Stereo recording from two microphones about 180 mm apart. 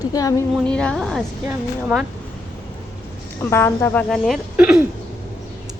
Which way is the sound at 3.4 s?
15° left (ahead or behind).